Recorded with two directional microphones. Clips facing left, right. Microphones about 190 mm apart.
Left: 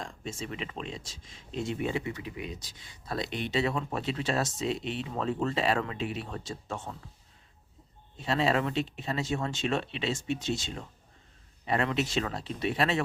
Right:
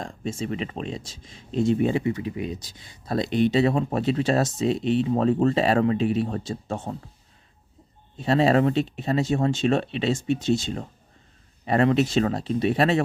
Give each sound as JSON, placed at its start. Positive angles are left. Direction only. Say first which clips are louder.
{"t": 0.0, "sound": "speech", "louder": "right 8 dB", "side_deg": -35}
{"t": 8.2, "sound": "speech", "louder": "right 8 dB", "side_deg": -40}